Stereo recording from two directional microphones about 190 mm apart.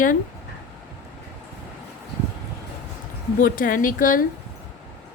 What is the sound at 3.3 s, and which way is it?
Speech, 45° left (ahead or behind).